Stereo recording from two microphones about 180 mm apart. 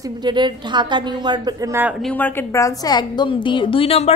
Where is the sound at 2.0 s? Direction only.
5° left (ahead or behind); by 4.1 s 30° left (ahead or behind).